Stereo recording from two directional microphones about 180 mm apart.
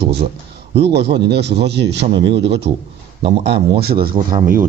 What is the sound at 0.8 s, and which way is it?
A man's voice, 70° right (ahead or behind).